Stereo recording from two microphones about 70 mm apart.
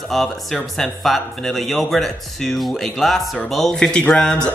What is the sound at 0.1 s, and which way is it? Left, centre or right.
Speech, centre.